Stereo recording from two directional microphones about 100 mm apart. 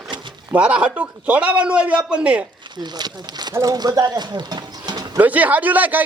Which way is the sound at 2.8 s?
45° right (ahead or behind).